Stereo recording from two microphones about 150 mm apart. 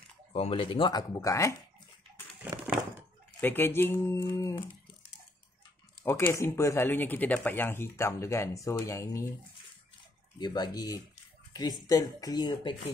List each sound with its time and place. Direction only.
0.3 s speech: 40° left (ahead or behind); by 1.6 s 20° left (ahead or behind)
3.3 s speech: 15° left (ahead or behind)
6.0 s speech: 15° left (ahead or behind)
10.4 s speech: 30° left (ahead or behind)